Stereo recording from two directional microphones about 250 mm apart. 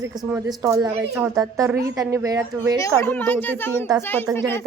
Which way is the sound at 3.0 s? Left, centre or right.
Centre.